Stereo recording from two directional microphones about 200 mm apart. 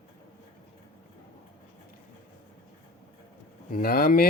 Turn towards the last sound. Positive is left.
turn(degrees=45)  # may be behind; listen again after turning